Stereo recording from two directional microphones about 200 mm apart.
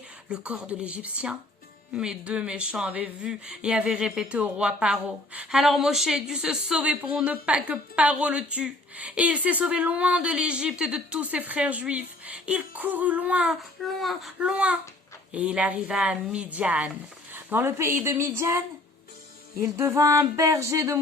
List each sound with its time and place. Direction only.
0.3 s a woman's voice: 5° right (ahead or behind)
19.6 s a woman's voice: 15° right (ahead or behind)